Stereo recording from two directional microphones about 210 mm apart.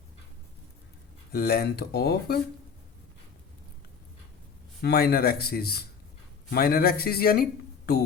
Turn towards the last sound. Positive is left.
turn(degrees=45)  # may be behind; listen again after turning